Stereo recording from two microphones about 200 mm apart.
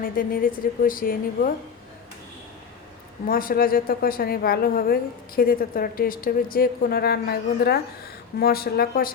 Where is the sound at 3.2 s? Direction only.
45° left (ahead or behind).